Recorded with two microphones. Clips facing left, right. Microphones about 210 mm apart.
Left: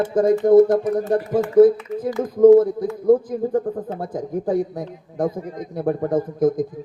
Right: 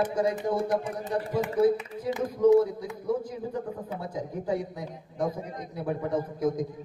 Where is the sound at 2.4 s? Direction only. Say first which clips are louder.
Left 9 dB; 50° left (ahead or behind).